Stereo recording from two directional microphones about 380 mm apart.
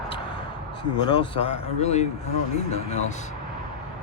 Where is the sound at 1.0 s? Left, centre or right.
Centre.